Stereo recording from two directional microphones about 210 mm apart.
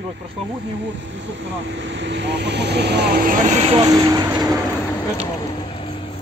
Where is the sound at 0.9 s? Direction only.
60° right (ahead or behind); by 3.8 s 30° right (ahead or behind).